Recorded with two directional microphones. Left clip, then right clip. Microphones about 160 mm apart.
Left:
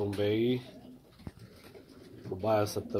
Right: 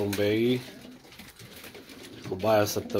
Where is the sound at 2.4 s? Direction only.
5° right (ahead or behind).